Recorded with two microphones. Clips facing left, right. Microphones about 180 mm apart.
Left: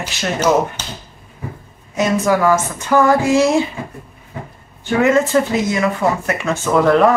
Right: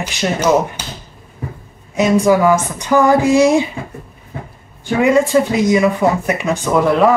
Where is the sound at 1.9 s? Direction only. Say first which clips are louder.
Right 4 dB; 10° right (ahead or behind).